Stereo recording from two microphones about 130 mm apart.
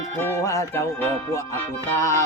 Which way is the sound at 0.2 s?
20° left (ahead or behind).